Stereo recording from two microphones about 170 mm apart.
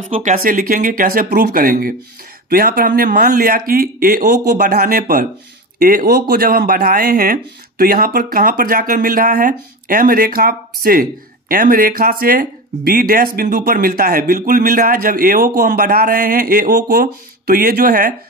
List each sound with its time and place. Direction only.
0.1 s speech: 45° right (ahead or behind); by 18.1 s 65° right (ahead or behind)